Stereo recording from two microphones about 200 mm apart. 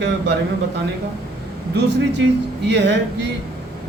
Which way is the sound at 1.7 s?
60° right (ahead or behind).